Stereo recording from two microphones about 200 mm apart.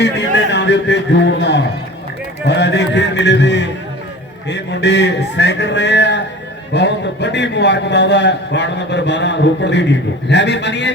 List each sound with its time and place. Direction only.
0.0 s a man's voice: 60° left (ahead or behind)